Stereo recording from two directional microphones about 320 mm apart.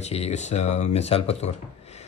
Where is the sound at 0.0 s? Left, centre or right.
Centre.